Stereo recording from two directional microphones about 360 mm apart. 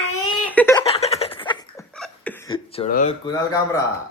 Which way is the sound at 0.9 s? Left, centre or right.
Centre.